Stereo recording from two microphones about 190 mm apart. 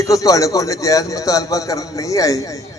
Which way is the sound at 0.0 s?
15° left (ahead or behind).